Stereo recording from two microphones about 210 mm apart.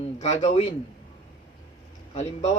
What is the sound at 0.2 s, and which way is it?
Speech, 35° left (ahead or behind).